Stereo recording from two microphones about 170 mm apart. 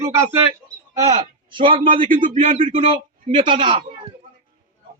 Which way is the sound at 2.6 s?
30° right (ahead or behind).